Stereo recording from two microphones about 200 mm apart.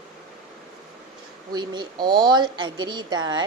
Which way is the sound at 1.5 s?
20° right (ahead or behind).